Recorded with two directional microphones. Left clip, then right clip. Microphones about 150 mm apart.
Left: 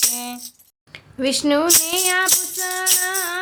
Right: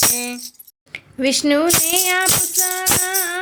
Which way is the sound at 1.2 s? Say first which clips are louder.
Right 2 dB; 20° right (ahead or behind).